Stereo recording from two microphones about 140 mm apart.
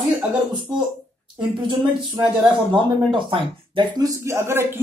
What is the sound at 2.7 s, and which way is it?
Speech, 35° right (ahead or behind).